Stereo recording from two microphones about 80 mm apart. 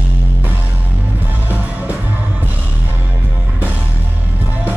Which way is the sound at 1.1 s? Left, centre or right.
Right.